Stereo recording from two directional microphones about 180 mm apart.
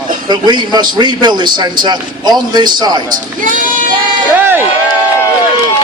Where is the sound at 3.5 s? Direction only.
45° right (ahead or behind).